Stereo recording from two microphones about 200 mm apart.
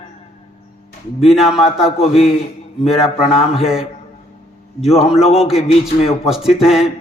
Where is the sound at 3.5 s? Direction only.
Centre (ahead or behind).